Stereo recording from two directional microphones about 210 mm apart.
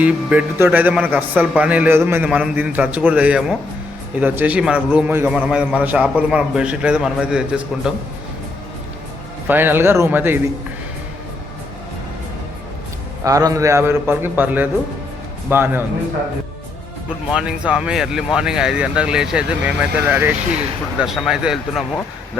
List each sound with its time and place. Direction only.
0.0 s a man's voice: 5° right (ahead or behind)
9.5 s a man's voice: 10° right (ahead or behind)
13.2 s a man's voice: 15° right (ahead or behind)
17.3 s a man's voice: 5° right (ahead or behind)